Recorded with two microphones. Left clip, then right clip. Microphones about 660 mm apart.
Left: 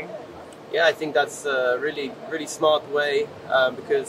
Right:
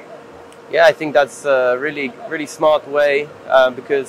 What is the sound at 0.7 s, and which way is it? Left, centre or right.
Speech, right.